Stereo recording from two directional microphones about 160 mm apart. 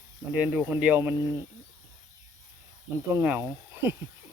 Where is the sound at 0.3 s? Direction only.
10° right (ahead or behind).